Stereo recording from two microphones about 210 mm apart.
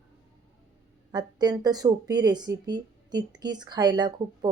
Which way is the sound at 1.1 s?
20° right (ahead or behind).